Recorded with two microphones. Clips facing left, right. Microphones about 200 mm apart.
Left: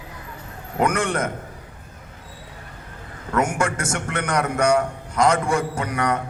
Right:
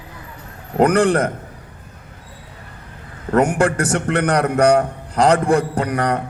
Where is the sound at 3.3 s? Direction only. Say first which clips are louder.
Right 6 dB; 35° right (ahead or behind).